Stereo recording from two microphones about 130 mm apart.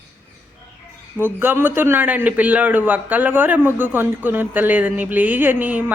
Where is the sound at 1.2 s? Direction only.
15° right (ahead or behind).